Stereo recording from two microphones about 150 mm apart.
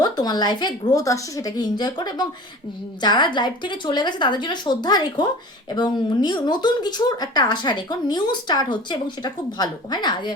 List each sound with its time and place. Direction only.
0.0 s speech: 25° left (ahead or behind)